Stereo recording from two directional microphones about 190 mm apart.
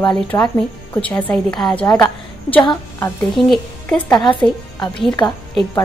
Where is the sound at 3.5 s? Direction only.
10° left (ahead or behind).